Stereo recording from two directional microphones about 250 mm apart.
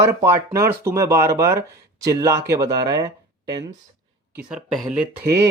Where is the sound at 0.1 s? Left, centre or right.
Centre.